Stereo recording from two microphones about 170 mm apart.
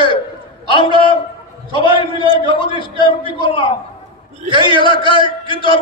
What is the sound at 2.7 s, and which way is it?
Speech, 30° right (ahead or behind).